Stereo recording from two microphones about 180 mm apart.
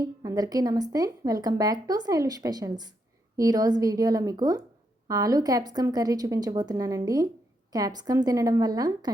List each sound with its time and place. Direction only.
0.0 s speech: 20° right (ahead or behind)